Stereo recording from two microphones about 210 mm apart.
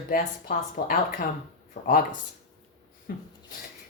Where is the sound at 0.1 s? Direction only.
45° left (ahead or behind).